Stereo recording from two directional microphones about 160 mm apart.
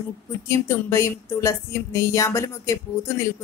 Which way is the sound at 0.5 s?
15° left (ahead or behind).